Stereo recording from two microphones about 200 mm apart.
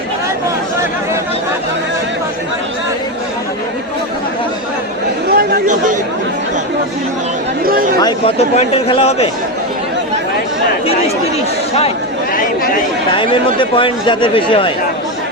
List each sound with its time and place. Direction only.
5.4 s speech: 45° right (ahead or behind)
7.6 s speech: 45° right (ahead or behind)
8.5 s a man's voice: 30° left (ahead or behind)
13.1 s speech: 25° left (ahead or behind)